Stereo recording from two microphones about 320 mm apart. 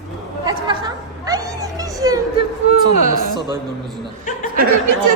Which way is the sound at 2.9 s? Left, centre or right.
Right.